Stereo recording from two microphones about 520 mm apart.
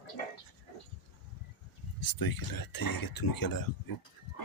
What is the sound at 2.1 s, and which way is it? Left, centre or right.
Speech, left.